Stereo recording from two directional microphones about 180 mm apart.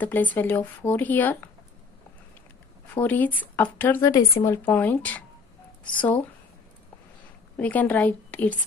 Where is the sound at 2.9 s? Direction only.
10° left (ahead or behind).